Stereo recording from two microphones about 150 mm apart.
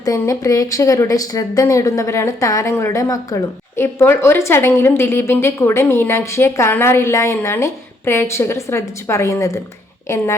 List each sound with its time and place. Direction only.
0.0 s speech: 20° left (ahead or behind)